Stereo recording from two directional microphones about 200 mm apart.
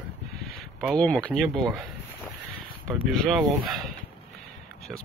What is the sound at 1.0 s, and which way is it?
Speech, 5° left (ahead or behind).